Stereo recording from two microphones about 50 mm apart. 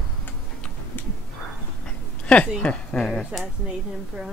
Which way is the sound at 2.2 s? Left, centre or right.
Left.